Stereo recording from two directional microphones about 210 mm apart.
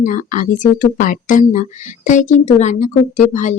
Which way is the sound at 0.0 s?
40° left (ahead or behind).